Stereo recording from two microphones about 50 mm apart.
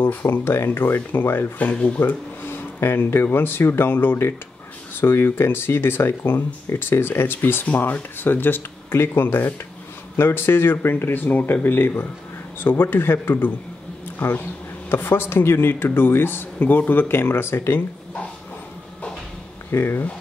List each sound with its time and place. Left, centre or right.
0.0 s speech: left
1.6 s speech: left
2.0 s speech: left
7.6 s speech: left
14.9 s speech: left
17.1 s speech: left
19.7 s speech: left